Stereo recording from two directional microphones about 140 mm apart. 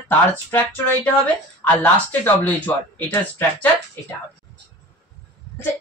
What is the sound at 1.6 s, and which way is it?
Speech, 15° left (ahead or behind).